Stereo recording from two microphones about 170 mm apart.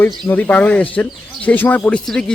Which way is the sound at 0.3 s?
10° left (ahead or behind).